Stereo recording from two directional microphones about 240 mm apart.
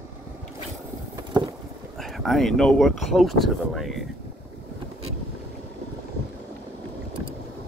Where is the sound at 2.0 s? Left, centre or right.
Centre.